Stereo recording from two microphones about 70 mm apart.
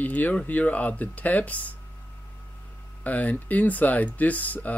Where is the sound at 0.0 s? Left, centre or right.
Left.